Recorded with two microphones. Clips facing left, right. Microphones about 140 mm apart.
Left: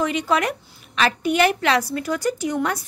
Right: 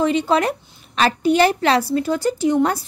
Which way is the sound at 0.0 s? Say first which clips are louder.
Right 4 dB; 30° right (ahead or behind).